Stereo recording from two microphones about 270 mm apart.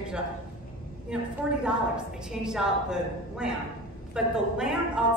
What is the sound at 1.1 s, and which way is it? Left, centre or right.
A woman's voice, centre.